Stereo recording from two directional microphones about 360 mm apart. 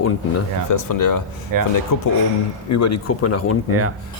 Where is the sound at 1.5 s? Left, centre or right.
Right.